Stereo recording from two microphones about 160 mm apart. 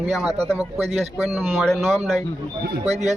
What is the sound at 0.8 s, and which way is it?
Speech, 40° right (ahead or behind).